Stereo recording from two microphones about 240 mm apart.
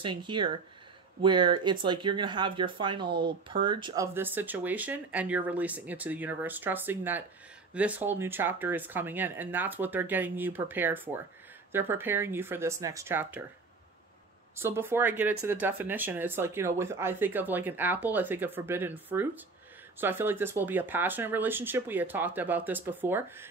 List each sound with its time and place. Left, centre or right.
0.0 s speech: centre
14.6 s speech: centre